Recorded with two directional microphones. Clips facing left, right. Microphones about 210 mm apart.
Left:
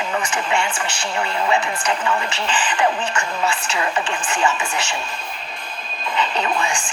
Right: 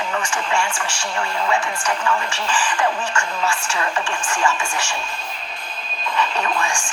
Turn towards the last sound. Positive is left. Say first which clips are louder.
# left 1 dB
turn(degrees=20)  # may be behind; listen again after turning